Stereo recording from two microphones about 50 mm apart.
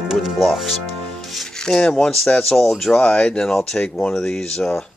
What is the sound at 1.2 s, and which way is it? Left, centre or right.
Music, centre.